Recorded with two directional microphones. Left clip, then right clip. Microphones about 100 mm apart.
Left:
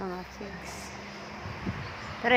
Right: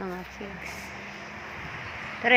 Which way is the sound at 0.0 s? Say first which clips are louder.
Right 1 dB; 15° right (ahead or behind).